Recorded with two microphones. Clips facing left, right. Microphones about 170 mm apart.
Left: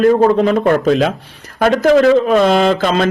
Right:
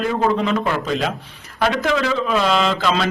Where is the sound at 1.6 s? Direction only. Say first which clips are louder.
Left 9 dB; 45° left (ahead or behind).